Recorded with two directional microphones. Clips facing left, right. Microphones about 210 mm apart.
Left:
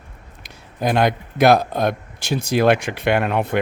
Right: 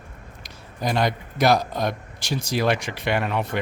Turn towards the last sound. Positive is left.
turn(degrees=55)  # may be behind; listen again after turning